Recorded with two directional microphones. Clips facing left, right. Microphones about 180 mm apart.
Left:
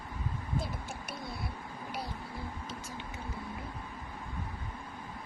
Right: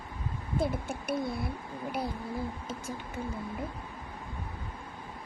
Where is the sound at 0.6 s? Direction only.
55° right (ahead or behind).